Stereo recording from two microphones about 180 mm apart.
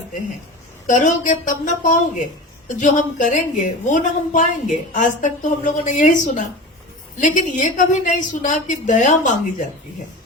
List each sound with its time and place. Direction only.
0.9 s a woman's voice: 45° left (ahead or behind)